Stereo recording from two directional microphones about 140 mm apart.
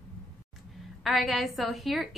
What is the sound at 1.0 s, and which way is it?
A woman's voice, centre (ahead or behind).